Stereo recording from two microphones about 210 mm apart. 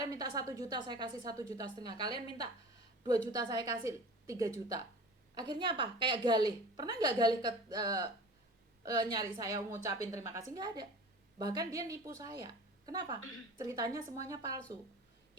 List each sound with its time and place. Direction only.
0.0 s a woman's voice: 20° right (ahead or behind)